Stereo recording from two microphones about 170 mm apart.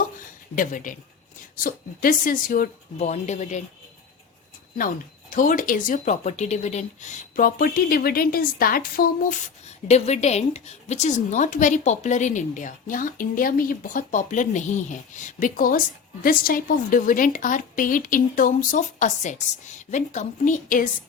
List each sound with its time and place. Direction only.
0.5 s a woman's voice: 50° left (ahead or behind)
5.3 s a woman's voice: 50° left (ahead or behind)
9.6 s a woman's voice: 40° left (ahead or behind)